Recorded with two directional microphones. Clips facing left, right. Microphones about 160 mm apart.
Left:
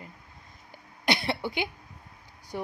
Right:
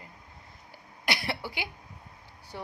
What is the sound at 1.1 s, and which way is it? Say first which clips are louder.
Cough: left 5 dB; 20° left (ahead or behind).